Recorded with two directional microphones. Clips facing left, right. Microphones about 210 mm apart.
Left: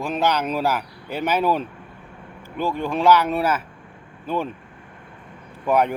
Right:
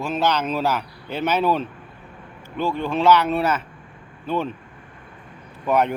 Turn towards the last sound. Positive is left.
turn(degrees=10)  # may be behind; listen again after turning